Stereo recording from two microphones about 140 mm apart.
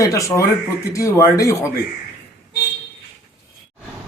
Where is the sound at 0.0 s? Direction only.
25° left (ahead or behind).